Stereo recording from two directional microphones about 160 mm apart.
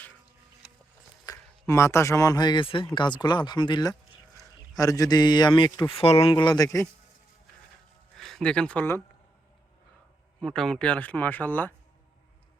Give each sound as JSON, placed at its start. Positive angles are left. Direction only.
{"t": 1.2, "sound": "a man's voice", "side_deg": 20}
{"t": 8.1, "sound": "speech", "side_deg": 5}
{"t": 10.4, "sound": "speech", "side_deg": 0}